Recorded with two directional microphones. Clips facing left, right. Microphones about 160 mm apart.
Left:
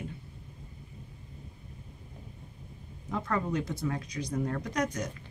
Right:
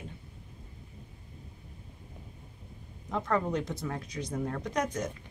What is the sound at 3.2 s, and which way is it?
A woman's voice, centre (ahead or behind).